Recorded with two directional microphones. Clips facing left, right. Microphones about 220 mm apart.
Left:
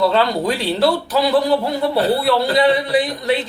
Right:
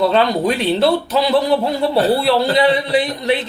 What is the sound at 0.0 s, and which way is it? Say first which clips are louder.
Speech: right 2 dB; 20° right (ahead or behind).